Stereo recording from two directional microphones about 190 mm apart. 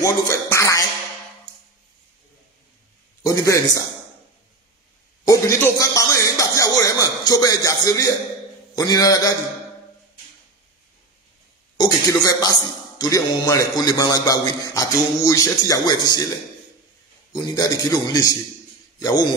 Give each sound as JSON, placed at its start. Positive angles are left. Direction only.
{"t": 0.0, "sound": "music", "side_deg": 15}
{"t": 3.2, "sound": "a man's voice", "side_deg": 15}
{"t": 5.2, "sound": "music", "side_deg": 15}
{"t": 8.7, "sound": "a man's voice", "side_deg": 20}
{"t": 11.7, "sound": "a man's voice", "side_deg": 20}
{"t": 17.3, "sound": "a man's voice", "side_deg": 20}